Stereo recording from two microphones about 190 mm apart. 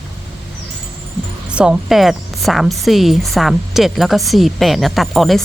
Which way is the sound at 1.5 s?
5° right (ahead or behind).